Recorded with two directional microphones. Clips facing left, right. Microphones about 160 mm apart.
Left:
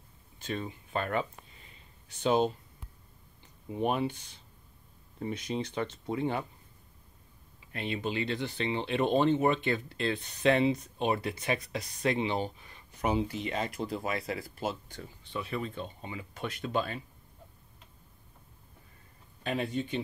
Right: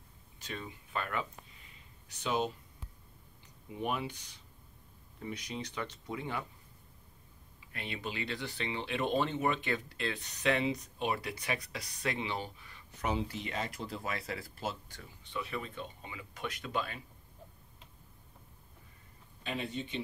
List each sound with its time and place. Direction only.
0.5 s speech: 35° left (ahead or behind)
3.7 s speech: 35° left (ahead or behind)
7.7 s speech: 25° left (ahead or behind)
15.0 s speech: 35° left (ahead or behind)
19.4 s speech: 50° left (ahead or behind)